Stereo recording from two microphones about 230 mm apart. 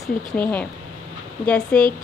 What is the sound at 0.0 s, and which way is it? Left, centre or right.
A woman's voice, centre.